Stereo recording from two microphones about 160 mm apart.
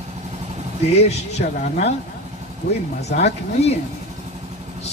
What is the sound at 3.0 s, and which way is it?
Speech, 90° left.